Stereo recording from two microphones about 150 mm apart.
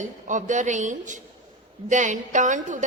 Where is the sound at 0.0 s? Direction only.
55° right (ahead or behind).